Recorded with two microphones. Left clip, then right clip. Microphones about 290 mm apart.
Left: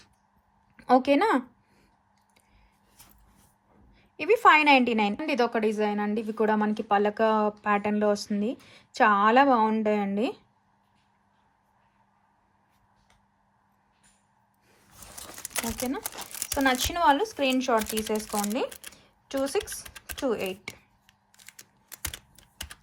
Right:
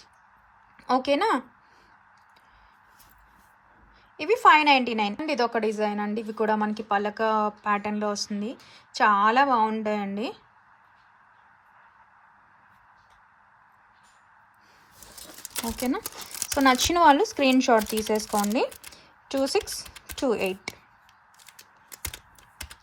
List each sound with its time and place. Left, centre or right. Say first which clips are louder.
0.8 s speech: left 2 dB; centre
4.2 s a woman's voice: right 1 dB; centre
16.6 s speech: right 5 dB; centre